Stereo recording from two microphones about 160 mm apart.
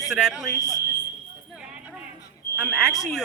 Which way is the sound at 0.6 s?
20° left (ahead or behind).